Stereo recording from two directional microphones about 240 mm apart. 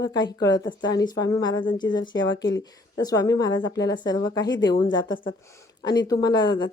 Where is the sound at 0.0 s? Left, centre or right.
Centre.